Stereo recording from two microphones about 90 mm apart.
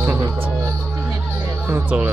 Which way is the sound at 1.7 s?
15° right (ahead or behind).